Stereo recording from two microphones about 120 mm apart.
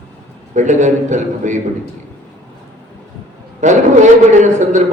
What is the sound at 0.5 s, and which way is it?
A man's voice, 90° right.